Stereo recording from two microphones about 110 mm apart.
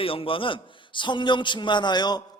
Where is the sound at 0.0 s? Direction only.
55° left (ahead or behind).